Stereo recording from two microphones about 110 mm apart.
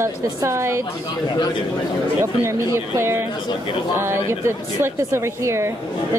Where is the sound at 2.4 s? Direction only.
25° right (ahead or behind).